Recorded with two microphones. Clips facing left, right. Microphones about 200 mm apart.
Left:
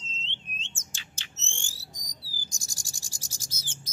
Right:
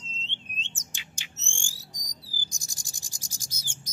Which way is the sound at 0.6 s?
15° right (ahead or behind).